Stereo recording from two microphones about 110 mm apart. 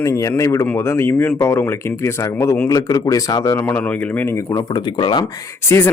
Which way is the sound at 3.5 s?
20° left (ahead or behind).